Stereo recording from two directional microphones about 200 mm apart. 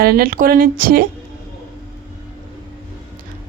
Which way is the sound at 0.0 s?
50° right (ahead or behind).